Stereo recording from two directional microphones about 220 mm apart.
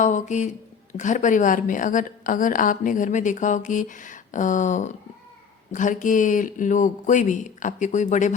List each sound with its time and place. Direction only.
0.0 s a woman's voice: 35° left (ahead or behind)